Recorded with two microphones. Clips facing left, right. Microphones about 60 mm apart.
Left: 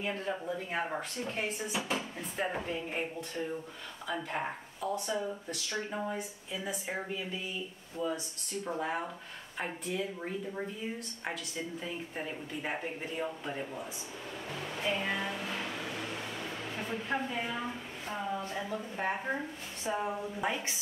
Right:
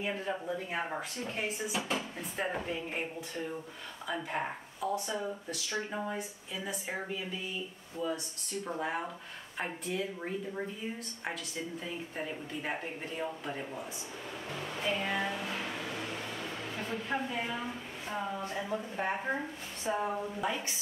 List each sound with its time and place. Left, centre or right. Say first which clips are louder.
0.0 s speech: even; centre
8.6 s speech: left 1 dB; centre
11.8 s speech: even; centre
15.2 s a sound: right 1 dB; centre
18.5 s speech: right 1 dB; centre
20.4 s a woman's voice: left 2 dB; left